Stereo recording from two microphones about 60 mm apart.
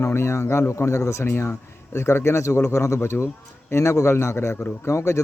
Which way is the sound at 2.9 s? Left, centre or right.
Left.